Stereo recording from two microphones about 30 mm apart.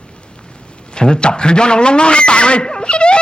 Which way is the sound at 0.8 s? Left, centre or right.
Left.